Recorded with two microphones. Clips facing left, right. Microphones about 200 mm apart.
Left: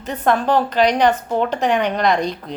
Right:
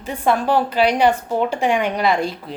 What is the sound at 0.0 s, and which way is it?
A woman's voice, 10° right (ahead or behind).